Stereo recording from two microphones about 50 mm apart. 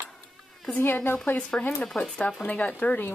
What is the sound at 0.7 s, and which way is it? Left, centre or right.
Speech, left.